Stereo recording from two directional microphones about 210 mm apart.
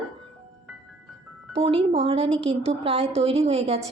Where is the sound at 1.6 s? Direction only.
25° right (ahead or behind).